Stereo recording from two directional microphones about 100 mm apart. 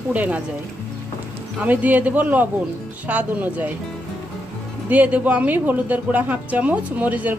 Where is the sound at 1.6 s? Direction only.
15° right (ahead or behind).